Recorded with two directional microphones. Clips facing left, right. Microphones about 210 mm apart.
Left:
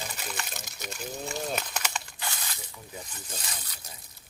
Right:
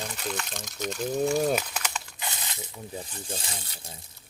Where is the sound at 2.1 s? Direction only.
20° right (ahead or behind).